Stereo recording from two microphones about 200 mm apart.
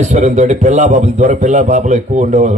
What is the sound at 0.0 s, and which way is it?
A man's voice, 35° right (ahead or behind).